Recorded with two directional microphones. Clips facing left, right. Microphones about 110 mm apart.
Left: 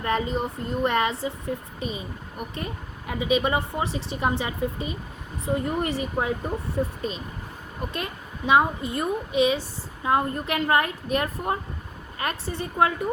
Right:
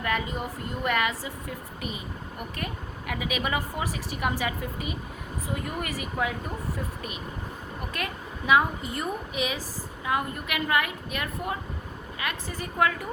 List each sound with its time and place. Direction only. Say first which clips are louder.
0.0 s a woman's voice: left 4 dB; 30° left (ahead or behind)
7.9 s a woman's voice: left 1 dB; 25° left (ahead or behind)
12.5 s a woman's voice: left 3 dB; 25° left (ahead or behind)